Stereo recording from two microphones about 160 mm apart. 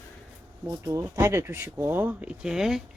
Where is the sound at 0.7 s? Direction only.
20° right (ahead or behind).